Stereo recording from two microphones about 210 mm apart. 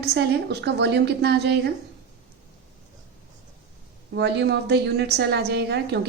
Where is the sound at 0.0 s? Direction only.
50° right (ahead or behind).